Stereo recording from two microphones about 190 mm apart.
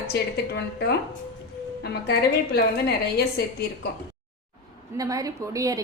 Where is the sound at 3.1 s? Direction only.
60° left (ahead or behind).